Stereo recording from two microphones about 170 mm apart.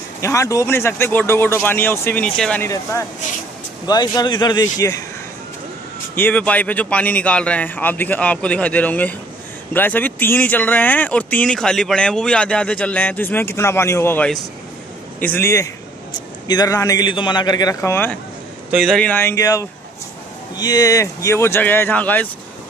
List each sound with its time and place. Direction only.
0.2 s a man's voice: 15° left (ahead or behind)
6.1 s a man's voice: 10° left (ahead or behind)
18.7 s speech: centre (ahead or behind)